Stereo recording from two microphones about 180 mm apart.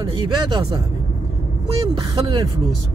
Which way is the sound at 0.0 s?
25° right (ahead or behind).